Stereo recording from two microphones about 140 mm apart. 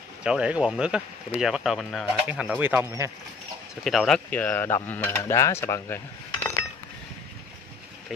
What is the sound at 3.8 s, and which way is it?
Speech, centre (ahead or behind).